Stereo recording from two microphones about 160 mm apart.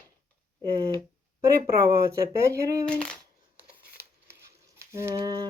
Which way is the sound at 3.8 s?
85° right.